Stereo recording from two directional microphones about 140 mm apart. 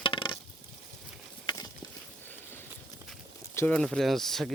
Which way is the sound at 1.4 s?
25° left (ahead or behind).